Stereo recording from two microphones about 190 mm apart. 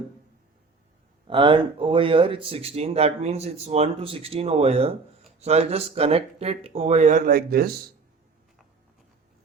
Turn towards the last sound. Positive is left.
turn(degrees=-55)  # may be behind; listen again after turning